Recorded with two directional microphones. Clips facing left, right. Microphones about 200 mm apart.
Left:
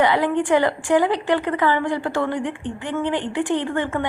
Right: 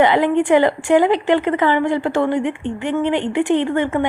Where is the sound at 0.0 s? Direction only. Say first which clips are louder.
Right 4 dB; 20° right (ahead or behind).